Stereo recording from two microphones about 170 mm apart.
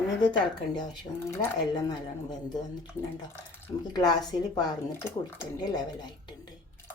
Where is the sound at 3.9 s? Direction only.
25° left (ahead or behind).